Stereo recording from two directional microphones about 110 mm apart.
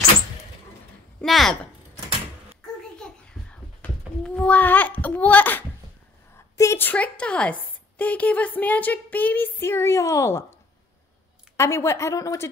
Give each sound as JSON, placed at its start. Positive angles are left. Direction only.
{"t": 1.2, "sound": "speech", "side_deg": 0}
{"t": 3.4, "sound": "a sound", "side_deg": 10}
{"t": 6.3, "sound": "a woman's voice", "side_deg": 25}
{"t": 11.5, "sound": "speech", "side_deg": 25}